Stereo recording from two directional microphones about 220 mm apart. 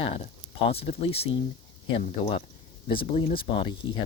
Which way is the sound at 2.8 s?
25° left (ahead or behind).